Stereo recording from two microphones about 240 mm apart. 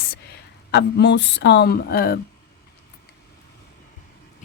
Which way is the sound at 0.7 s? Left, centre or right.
Left.